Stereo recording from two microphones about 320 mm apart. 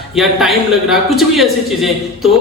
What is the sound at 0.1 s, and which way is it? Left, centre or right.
A man's voice, centre.